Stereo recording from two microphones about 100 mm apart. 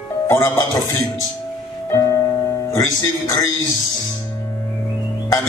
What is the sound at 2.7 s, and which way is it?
Speech, 30° left (ahead or behind).